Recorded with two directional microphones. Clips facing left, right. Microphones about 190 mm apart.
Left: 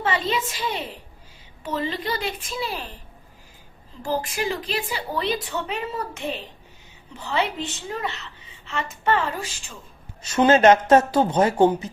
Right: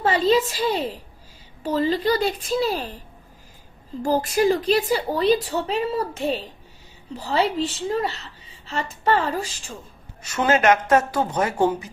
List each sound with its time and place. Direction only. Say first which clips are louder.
0.0 s a woman's voice: right 6 dB; 35° right (ahead or behind)
4.0 s a woman's voice: right 7 dB; 40° right (ahead or behind)
10.3 s speech: left 3 dB; 30° left (ahead or behind)